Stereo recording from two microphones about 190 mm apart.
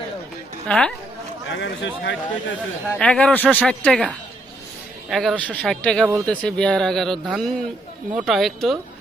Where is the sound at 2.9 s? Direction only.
5° left (ahead or behind).